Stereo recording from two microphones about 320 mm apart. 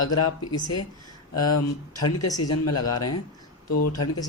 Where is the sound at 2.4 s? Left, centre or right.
Left.